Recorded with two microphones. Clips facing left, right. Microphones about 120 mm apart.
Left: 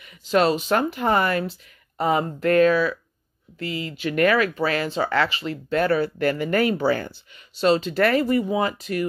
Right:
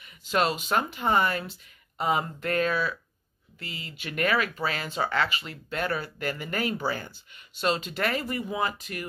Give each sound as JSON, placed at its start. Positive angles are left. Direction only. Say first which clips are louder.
{"t": 0.3, "sound": "speech", "louder": "left 6 dB", "side_deg": 40}
{"t": 7.9, "sound": "speech", "louder": "left 10 dB", "side_deg": 40}